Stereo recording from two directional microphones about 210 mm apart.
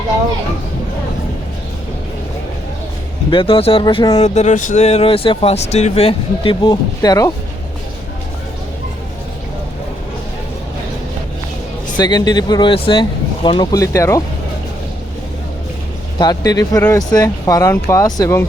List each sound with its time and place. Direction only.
3.2 s speech: 25° left (ahead or behind)
11.9 s speech: 20° left (ahead or behind)
16.1 s speech: 20° left (ahead or behind)